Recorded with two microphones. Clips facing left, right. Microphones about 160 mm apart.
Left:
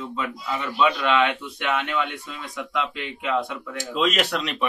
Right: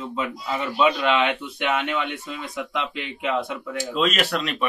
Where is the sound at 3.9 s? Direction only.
15° left (ahead or behind).